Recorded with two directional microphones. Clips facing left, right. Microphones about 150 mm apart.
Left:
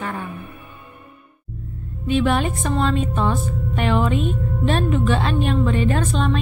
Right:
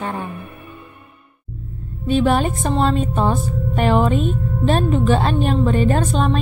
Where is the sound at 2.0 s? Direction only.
35° right (ahead or behind).